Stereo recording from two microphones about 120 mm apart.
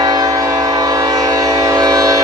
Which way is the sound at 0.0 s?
30° right (ahead or behind).